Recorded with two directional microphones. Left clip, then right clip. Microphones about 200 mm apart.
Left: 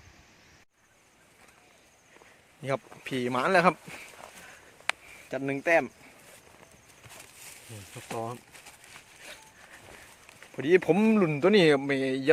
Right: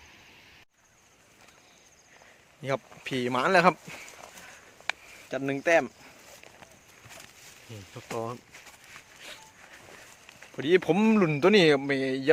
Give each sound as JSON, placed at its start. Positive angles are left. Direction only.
{"t": 2.6, "sound": "speech", "side_deg": 0}
{"t": 4.9, "sound": "a sound", "side_deg": 25}
{"t": 5.3, "sound": "speech", "side_deg": 0}
{"t": 8.0, "sound": "speech", "side_deg": -5}
{"t": 8.9, "sound": "a sound", "side_deg": 0}
{"t": 10.5, "sound": "speech", "side_deg": 5}
{"t": 11.1, "sound": "speech", "side_deg": -10}
{"t": 11.6, "sound": "speech", "side_deg": 5}